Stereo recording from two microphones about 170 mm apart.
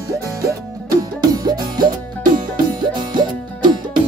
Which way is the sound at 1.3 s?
25° right (ahead or behind).